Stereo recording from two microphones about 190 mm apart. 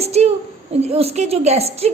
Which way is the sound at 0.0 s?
35° right (ahead or behind).